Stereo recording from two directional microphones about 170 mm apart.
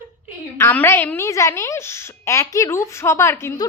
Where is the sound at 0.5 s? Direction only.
15° left (ahead or behind).